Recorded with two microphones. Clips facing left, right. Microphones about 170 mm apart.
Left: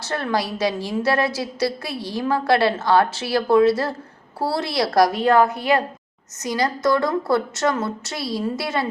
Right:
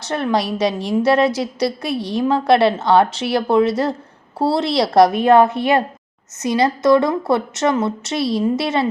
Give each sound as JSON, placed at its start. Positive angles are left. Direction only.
{"t": 0.0, "sound": "a woman's voice", "side_deg": -20}